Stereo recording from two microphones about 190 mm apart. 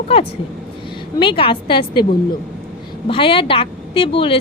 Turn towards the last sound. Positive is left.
turn(degrees=30)  # may be behind; listen again after turning